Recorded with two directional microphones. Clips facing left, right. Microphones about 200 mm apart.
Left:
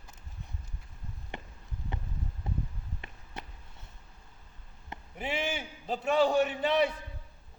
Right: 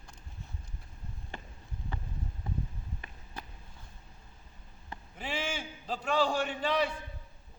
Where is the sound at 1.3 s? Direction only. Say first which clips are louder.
Left 3 dB; 20° left (ahead or behind).